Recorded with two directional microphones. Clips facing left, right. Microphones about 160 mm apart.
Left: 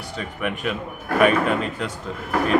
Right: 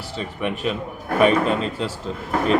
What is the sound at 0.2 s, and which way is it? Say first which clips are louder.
Speech: right 2 dB; 30° right (ahead or behind).